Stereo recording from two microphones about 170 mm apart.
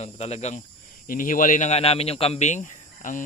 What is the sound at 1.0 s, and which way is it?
Speech, 55° left (ahead or behind).